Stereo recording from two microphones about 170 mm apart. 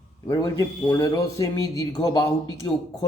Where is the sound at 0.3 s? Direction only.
20° left (ahead or behind).